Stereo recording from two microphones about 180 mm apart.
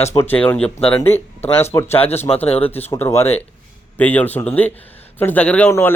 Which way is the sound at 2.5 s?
30° left (ahead or behind).